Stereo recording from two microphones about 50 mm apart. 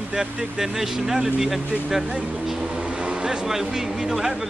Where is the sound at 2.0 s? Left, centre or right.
Centre.